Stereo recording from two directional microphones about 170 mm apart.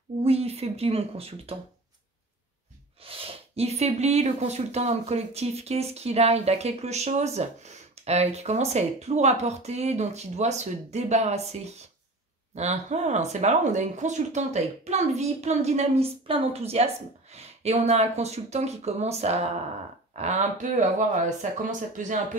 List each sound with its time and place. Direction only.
0.2 s speech: 35° right (ahead or behind)
3.0 s speech: 35° right (ahead or behind)